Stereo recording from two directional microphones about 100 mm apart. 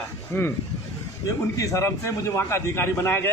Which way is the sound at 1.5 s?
35° left (ahead or behind).